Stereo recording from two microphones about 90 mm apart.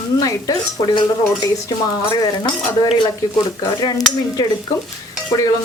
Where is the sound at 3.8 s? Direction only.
45° left (ahead or behind).